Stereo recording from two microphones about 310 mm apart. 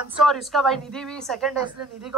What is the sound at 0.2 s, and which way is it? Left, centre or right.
A woman's voice, centre.